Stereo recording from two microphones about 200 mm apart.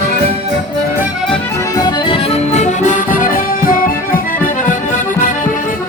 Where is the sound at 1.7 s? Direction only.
20° left (ahead or behind); by 3.9 s 45° left (ahead or behind).